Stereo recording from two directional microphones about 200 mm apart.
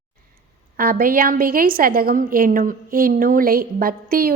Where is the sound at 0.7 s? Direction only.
45° right (ahead or behind).